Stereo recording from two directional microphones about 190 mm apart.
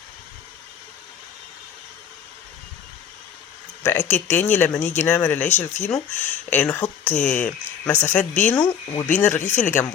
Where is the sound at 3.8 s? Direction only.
15° left (ahead or behind).